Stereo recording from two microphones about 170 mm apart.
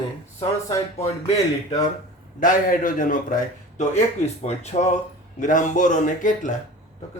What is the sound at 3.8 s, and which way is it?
A man's voice, 40° left (ahead or behind).